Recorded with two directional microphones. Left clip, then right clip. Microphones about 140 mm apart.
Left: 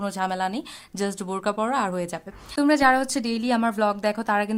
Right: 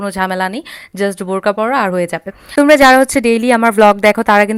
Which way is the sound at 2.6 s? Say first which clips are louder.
Right 12 dB; 50° right (ahead or behind).